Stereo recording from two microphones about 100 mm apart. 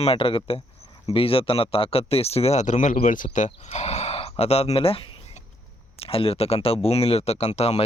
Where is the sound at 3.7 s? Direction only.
90° left.